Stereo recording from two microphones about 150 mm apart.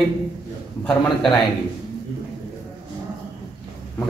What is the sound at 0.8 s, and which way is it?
Speech, 5° left (ahead or behind).